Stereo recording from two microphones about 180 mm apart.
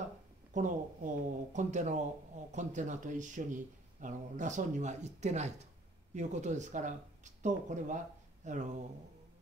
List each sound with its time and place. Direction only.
0.5 s speech: 45° right (ahead or behind)